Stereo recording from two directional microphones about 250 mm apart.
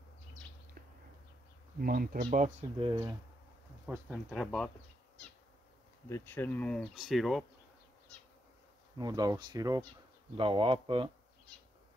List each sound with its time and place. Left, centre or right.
1.8 s speech: right
2.9 s speech: centre
3.8 s speech: centre
6.0 s speech: centre
8.9 s speech: centre